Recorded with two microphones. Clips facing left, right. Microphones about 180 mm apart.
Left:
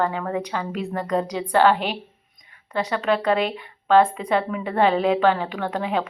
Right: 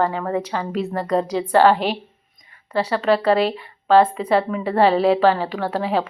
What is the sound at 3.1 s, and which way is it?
Speech, 35° right (ahead or behind).